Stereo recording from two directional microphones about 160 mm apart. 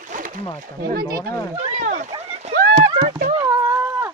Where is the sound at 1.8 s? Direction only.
50° right (ahead or behind).